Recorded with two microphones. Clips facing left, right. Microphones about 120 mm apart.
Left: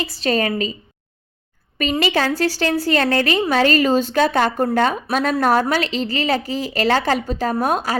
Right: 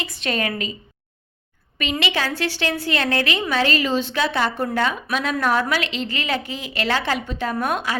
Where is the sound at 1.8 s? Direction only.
40° left (ahead or behind).